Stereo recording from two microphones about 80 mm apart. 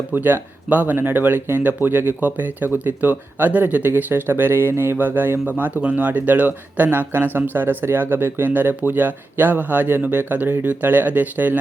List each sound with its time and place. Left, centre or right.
0.1 s speech: right